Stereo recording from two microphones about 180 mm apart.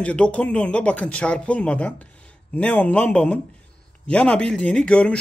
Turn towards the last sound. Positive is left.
turn(degrees=5)  # may be behind; listen again after turning